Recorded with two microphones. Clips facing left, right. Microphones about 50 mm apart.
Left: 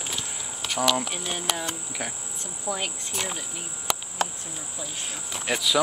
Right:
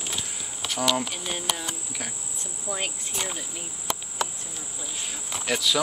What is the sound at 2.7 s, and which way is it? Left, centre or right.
Speech, left.